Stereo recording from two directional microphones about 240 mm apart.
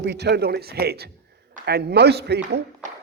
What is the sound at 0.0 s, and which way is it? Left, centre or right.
A man's voice, right.